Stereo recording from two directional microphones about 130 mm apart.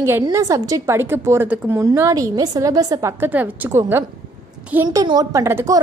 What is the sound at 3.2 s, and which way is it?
A woman's voice, 15° right (ahead or behind).